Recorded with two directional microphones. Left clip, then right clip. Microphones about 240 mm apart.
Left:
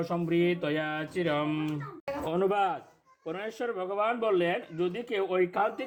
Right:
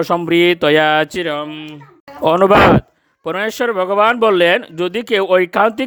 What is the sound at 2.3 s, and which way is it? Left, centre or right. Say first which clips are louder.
Mantra: right 19 dB; right.